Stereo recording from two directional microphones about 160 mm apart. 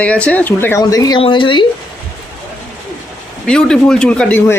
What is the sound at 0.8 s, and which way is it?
Speech, 25° left (ahead or behind).